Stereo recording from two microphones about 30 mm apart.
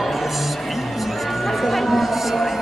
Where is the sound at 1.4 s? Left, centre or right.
Centre.